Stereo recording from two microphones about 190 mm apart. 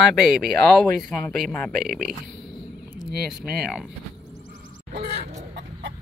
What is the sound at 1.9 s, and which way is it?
Speech, 45° right (ahead or behind).